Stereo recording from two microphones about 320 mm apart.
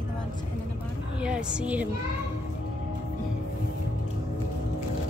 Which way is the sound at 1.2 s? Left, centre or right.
Centre.